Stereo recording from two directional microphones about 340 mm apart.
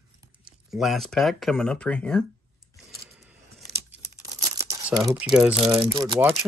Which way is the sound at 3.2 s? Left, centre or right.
Centre.